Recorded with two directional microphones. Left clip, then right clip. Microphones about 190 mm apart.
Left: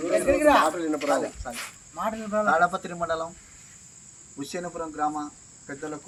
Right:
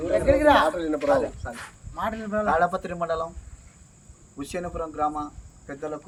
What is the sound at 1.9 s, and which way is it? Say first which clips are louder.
Speech: even; centre (ahead or behind).